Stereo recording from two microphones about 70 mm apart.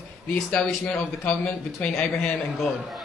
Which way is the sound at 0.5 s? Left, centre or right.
Centre.